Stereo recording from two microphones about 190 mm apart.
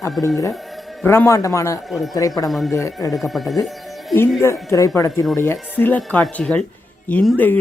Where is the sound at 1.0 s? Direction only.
15° left (ahead or behind).